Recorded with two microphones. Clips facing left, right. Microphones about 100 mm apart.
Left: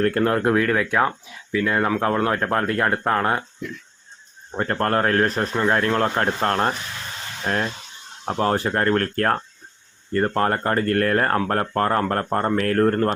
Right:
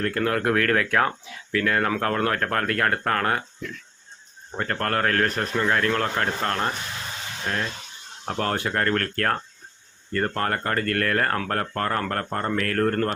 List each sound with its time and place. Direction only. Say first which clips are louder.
0.0 s speech: left 4 dB; 35° left (ahead or behind)
8.2 s speech: left 5 dB; 25° left (ahead or behind)